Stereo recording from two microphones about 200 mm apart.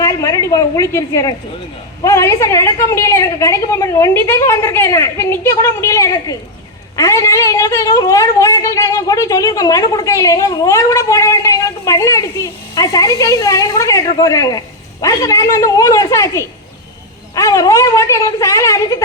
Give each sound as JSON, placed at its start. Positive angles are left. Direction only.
{"t": 0.0, "sound": "a woman's voice", "side_deg": 15}